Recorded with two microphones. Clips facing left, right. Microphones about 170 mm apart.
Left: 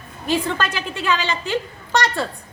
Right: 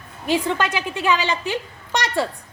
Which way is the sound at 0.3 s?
15° right (ahead or behind).